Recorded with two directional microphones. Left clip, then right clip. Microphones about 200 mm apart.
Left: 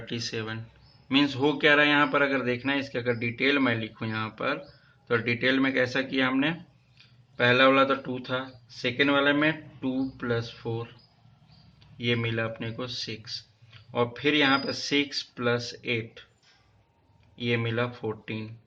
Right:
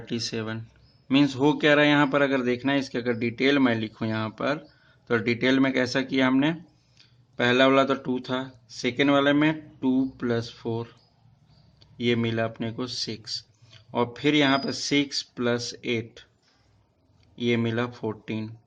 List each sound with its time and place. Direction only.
0.0 s speech: 55° right (ahead or behind)
11.9 s speech: 55° right (ahead or behind)
17.3 s speech: 55° right (ahead or behind)